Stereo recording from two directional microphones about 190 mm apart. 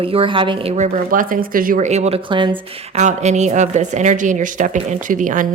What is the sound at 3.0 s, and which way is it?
A woman's voice, 35° right (ahead or behind).